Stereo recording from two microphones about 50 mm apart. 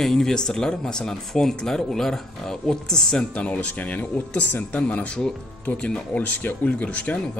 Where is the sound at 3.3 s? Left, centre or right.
Left.